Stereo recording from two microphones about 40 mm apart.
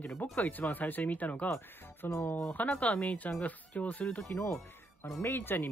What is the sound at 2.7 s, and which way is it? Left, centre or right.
Speech, left.